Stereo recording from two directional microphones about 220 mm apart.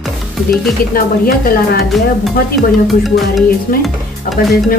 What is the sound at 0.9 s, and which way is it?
Speech, 40° left (ahead or behind).